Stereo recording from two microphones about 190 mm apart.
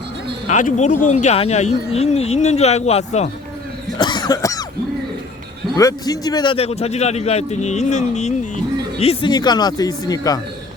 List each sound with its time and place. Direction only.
0.4 s a man's voice: 40° left (ahead or behind)
3.9 s cough: 20° left (ahead or behind)
5.7 s a man's voice: 20° left (ahead or behind)
9.3 s speech: 20° left (ahead or behind)